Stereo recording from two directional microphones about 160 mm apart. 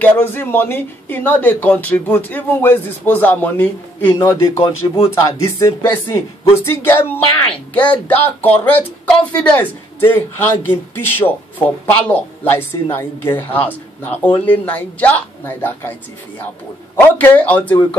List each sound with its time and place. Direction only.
0.0 s speech: 10° left (ahead or behind)
4.6 s speech: 35° left (ahead or behind)
5.4 s speech: 20° left (ahead or behind)
16.9 s speech: 10° left (ahead or behind)